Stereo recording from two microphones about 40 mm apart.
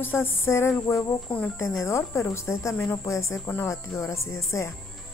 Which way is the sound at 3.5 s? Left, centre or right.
Left.